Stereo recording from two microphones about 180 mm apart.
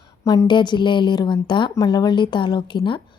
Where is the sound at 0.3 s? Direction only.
25° left (ahead or behind).